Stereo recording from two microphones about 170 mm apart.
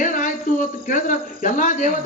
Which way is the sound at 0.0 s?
50° left (ahead or behind).